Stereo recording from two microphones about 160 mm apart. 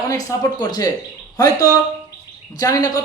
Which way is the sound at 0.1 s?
20° left (ahead or behind).